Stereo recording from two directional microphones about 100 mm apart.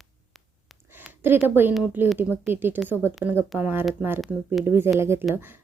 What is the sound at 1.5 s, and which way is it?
A woman's voice, 20° right (ahead or behind).